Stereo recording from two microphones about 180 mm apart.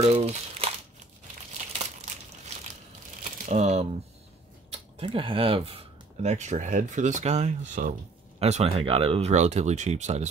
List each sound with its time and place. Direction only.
0.0 s speech: 35° right (ahead or behind)
3.4 s speech: 35° right (ahead or behind)